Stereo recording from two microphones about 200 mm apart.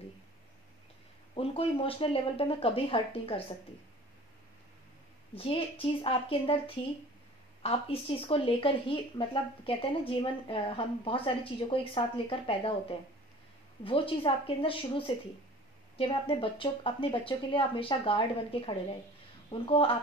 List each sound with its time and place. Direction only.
1.3 s speech: 30° left (ahead or behind)
5.3 s speech: 25° left (ahead or behind)
13.8 s speech: 25° left (ahead or behind)